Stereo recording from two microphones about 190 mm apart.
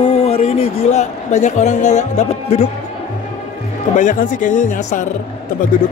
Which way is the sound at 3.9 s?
40° left (ahead or behind).